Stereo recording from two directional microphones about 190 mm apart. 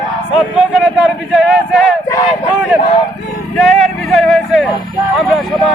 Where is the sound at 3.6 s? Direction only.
5° left (ahead or behind).